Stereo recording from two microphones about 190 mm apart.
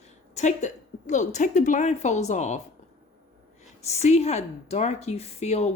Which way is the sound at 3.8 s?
35° left (ahead or behind).